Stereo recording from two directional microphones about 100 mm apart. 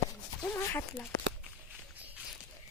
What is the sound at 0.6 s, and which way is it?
Speech, 25° left (ahead or behind).